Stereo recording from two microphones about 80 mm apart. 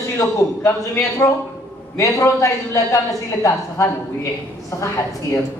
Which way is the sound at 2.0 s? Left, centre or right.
Left.